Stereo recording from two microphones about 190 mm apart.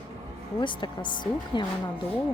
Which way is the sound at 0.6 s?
25° left (ahead or behind).